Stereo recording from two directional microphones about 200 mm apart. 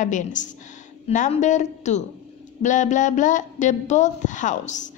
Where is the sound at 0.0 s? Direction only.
40° left (ahead or behind).